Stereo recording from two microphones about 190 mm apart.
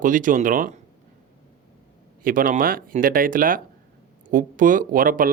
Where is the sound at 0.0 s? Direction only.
45° right (ahead or behind).